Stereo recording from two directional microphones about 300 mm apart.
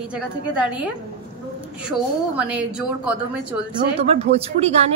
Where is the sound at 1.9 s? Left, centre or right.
Centre.